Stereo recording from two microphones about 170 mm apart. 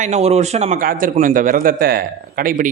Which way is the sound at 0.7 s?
55° right (ahead or behind).